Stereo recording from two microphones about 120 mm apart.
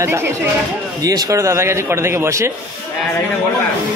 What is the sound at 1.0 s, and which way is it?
A man's voice, 30° right (ahead or behind).